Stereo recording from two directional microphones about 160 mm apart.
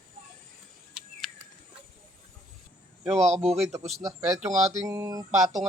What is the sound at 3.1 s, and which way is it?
Speech, 45° right (ahead or behind).